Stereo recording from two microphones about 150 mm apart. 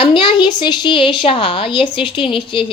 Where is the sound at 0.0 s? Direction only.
35° left (ahead or behind).